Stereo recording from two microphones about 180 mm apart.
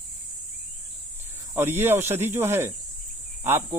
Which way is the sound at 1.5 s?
10° right (ahead or behind).